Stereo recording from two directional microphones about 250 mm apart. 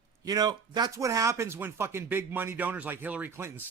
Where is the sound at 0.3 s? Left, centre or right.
Centre.